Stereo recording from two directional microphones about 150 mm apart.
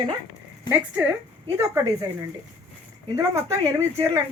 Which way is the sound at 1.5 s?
20° right (ahead or behind).